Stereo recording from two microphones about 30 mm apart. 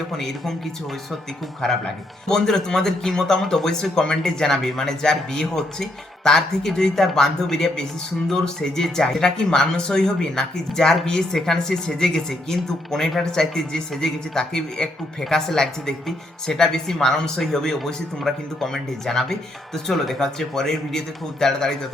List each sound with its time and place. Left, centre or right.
0.1 s speech: centre
1.6 s speech: centre